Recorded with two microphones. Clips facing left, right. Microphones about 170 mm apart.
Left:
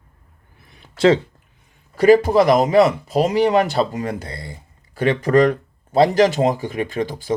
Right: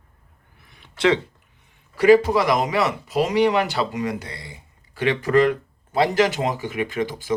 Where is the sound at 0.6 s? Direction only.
35° left (ahead or behind).